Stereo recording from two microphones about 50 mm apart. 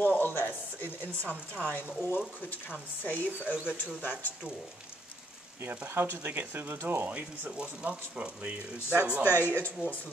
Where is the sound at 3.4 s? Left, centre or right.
Right.